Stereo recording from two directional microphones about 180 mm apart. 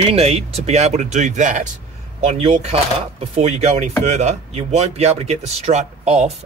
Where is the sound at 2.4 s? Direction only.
35° right (ahead or behind).